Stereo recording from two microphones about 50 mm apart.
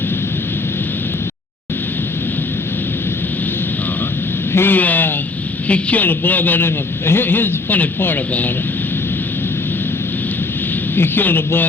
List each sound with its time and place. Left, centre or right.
4.5 s a man's voice: left
8.3 s a man's voice: left
10.9 s a man's voice: left